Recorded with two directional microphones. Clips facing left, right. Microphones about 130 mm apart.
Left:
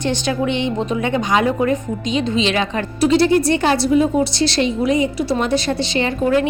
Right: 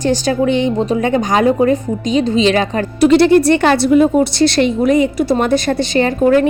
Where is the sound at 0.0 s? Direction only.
40° right (ahead or behind).